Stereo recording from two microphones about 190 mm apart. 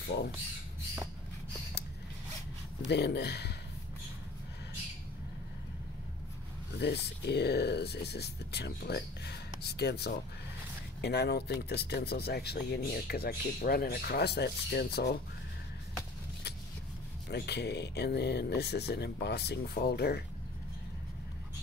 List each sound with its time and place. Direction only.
0.0 s speech: 60° left (ahead or behind)
2.8 s speech: 60° left (ahead or behind)
6.8 s speech: 65° left (ahead or behind)
17.3 s speech: 60° left (ahead or behind)